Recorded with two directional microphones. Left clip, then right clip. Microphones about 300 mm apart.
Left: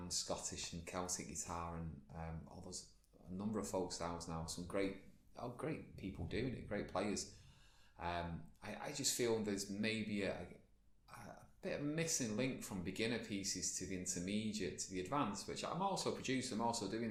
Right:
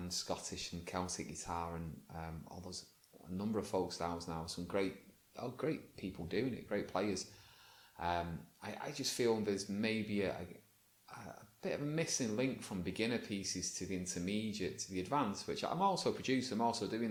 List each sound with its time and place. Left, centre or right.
0.1 s speech: right